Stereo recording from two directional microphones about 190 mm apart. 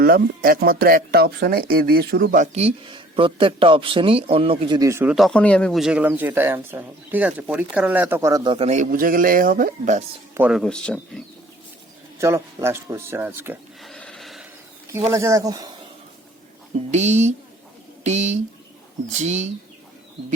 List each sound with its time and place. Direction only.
0.0 s speech: 50° right (ahead or behind); by 5.1 s 15° right (ahead or behind)
5.1 s speech: centre (ahead or behind); by 8.5 s 15° right (ahead or behind)
8.5 s speech: 35° right (ahead or behind)
10.3 s speech: 10° right (ahead or behind)
10.6 s speech: 5° left (ahead or behind)
12.2 s speech: 15° right (ahead or behind)
13.8 s neigh: 5° left (ahead or behind)
15.1 s speech: 15° right (ahead or behind)
16.9 s speech: 35° right (ahead or behind)